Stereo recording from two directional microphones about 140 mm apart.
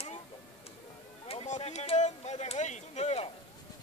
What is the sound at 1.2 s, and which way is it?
Speech, 50° left (ahead or behind).